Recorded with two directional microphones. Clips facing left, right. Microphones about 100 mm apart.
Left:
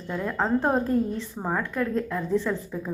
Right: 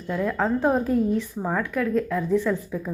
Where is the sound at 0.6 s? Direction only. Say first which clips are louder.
Right 2 dB; centre (ahead or behind).